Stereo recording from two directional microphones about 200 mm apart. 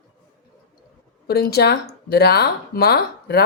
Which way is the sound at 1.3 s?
50° left (ahead or behind).